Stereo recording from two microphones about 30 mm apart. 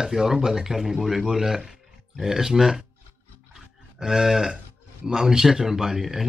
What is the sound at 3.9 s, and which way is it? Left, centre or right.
Speech, centre.